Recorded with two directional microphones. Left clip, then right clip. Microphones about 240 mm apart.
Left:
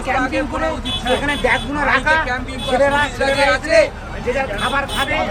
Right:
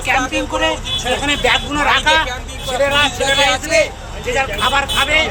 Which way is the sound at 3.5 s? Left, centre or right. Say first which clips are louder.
Left 1 dB; right.